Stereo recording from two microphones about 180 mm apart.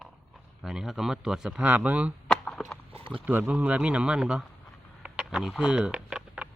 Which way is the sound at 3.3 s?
10° right (ahead or behind).